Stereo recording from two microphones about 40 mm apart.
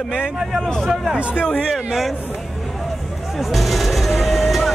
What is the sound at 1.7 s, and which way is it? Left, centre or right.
Speech, centre.